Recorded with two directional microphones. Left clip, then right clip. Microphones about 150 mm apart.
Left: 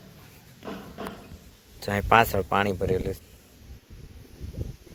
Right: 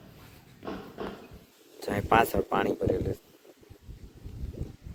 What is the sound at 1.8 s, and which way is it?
Speech, centre (ahead or behind).